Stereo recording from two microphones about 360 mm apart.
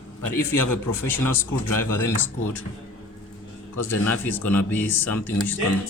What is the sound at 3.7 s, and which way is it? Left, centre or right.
Speech, left.